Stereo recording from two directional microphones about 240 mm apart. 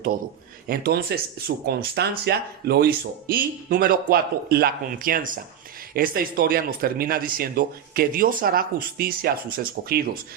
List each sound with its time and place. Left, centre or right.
0.7 s speech: right